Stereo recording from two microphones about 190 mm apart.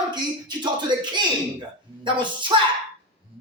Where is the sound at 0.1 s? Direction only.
25° right (ahead or behind).